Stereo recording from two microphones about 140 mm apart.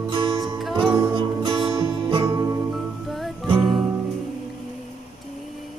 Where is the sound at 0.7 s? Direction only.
35° right (ahead or behind).